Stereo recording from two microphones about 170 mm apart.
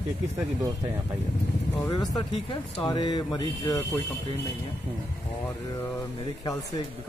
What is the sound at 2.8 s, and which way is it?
Speech, 25° left (ahead or behind).